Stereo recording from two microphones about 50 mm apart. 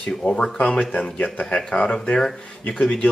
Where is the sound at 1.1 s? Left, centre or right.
Left.